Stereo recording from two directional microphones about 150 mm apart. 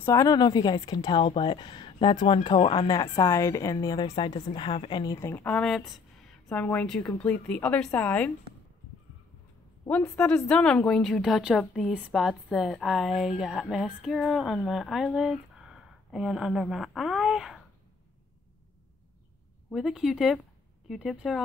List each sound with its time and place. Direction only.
0.0 s speech: 20° left (ahead or behind)
9.8 s speech: 10° left (ahead or behind)
19.7 s speech: centre (ahead or behind)